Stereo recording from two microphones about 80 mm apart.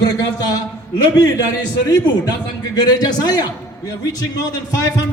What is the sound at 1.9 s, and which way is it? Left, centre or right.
A man's voice, left.